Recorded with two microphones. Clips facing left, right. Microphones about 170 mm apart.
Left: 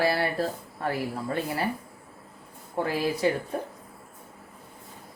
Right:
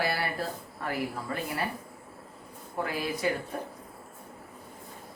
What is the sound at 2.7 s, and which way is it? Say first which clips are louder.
Speech: left 5 dB; 30° left (ahead or behind).